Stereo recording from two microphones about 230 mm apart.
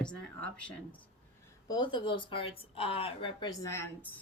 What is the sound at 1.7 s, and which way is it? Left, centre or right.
Speech, centre.